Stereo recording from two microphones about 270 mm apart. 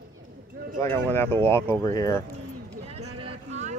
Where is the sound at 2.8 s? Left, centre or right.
Right.